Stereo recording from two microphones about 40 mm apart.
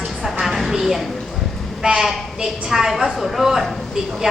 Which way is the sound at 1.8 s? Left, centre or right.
Centre.